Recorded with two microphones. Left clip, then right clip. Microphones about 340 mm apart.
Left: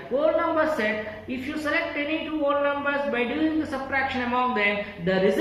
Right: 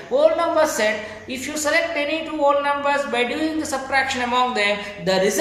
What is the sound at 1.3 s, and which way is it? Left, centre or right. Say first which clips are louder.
Speech: right 6 dB; centre.